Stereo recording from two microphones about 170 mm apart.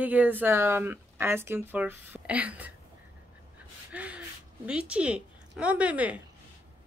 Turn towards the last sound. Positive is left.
turn(degrees=-10)  # may be behind; listen again after turning